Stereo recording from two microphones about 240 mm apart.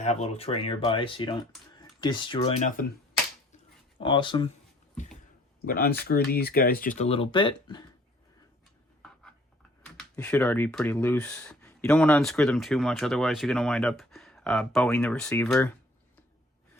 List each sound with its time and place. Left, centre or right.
0.0 s speech: left
2.8 s speech: left
4.0 s speech: centre
5.6 s speech: left; by 7.9 s centre
9.8 s speech: centre